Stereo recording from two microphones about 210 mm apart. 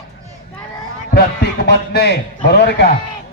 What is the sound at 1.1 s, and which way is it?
A man's voice, 50° left (ahead or behind).